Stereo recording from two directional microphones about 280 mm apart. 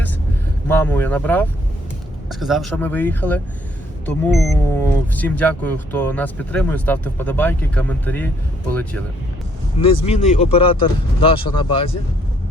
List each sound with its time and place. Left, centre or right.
0.7 s speech: centre
9.7 s speech: centre